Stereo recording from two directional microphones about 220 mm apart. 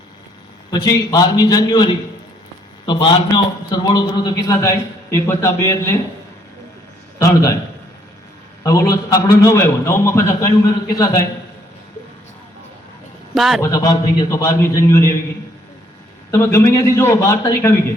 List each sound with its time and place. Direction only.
0.7 s a man's voice: 20° left (ahead or behind)
7.2 s a man's voice: 15° left (ahead or behind)
8.6 s a man's voice: 15° left (ahead or behind)
13.3 s a man's voice: centre (ahead or behind)
13.6 s a man's voice: 15° left (ahead or behind)
16.3 s a man's voice: 10° left (ahead or behind)